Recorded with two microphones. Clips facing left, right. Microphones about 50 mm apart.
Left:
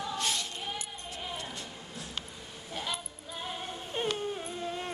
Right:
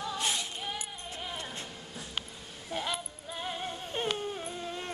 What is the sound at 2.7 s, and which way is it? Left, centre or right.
Music, centre.